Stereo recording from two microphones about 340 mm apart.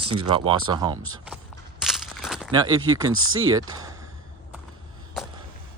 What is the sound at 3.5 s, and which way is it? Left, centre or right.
Speech, centre.